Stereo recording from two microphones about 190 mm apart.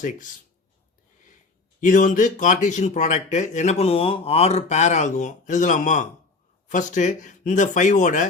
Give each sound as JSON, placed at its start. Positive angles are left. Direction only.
{"t": 1.8, "sound": "speech", "side_deg": 40}